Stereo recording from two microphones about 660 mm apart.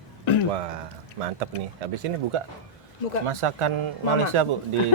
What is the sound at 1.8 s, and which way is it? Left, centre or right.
A man's voice, right.